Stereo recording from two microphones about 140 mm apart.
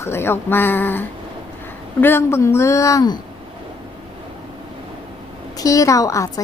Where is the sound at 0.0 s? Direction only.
15° left (ahead or behind).